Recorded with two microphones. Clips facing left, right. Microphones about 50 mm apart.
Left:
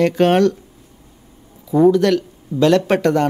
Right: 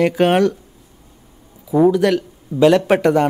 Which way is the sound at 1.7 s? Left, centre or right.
Centre.